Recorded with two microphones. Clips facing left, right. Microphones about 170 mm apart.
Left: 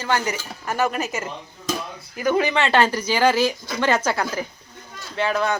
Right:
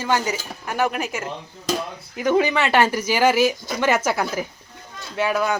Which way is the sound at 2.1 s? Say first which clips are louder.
Right 1 dB; 20° right (ahead or behind).